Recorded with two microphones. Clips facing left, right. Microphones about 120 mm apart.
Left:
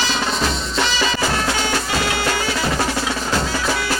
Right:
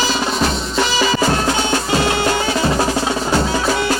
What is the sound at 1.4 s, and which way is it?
Music, 30° right (ahead or behind).